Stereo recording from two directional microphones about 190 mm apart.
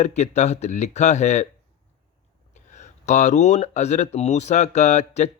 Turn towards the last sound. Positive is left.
turn(degrees=35)  # may be behind; listen again after turning